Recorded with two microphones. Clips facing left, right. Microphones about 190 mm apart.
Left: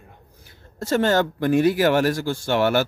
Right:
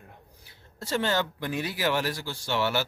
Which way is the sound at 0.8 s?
50° left (ahead or behind).